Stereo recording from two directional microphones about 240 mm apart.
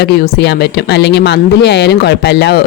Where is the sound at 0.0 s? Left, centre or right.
Left.